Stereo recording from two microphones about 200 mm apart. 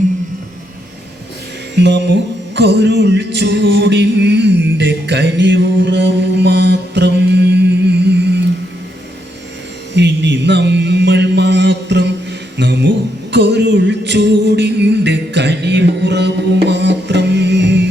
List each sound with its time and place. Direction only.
1.7 s speech: 60° right (ahead or behind)
2.6 s music: 60° right (ahead or behind)
9.9 s mantra: 60° right (ahead or behind)
12.5 s a sound: 60° right (ahead or behind)
13.3 s music: 60° right (ahead or behind)